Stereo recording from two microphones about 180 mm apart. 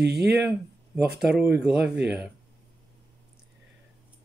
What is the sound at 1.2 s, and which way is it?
A woman's voice, 10° right (ahead or behind).